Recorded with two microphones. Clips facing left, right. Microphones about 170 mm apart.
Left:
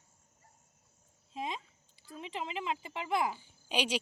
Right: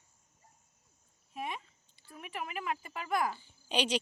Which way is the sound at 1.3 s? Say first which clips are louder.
Left 1 dB; 20° left (ahead or behind).